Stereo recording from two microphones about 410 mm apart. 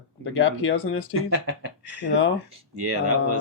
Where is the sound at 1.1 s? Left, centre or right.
Right.